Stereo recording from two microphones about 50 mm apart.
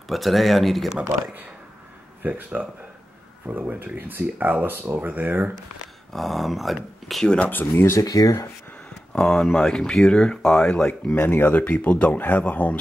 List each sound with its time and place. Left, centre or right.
0.1 s speech: centre
2.2 s speech: right
6.1 s speech: centre
7.3 s speech: left
7.7 s speech: left
9.1 s speech: centre
11.1 s speech: left
11.4 s speech: left